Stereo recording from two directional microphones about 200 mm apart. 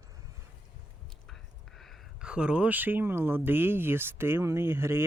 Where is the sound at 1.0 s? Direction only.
Centre (ahead or behind).